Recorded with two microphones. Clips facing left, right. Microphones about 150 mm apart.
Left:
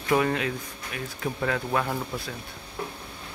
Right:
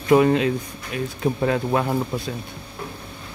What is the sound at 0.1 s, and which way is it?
Speech, 25° right (ahead or behind).